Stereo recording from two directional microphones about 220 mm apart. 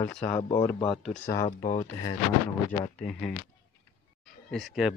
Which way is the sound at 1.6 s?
35° left (ahead or behind).